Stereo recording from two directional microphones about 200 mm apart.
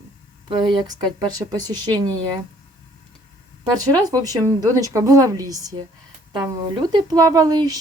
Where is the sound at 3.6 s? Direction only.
20° right (ahead or behind).